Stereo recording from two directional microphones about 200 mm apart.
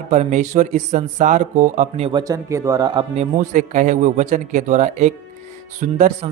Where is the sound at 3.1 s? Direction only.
35° right (ahead or behind).